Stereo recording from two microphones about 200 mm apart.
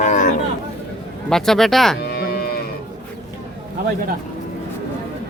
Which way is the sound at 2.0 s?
50° left (ahead or behind).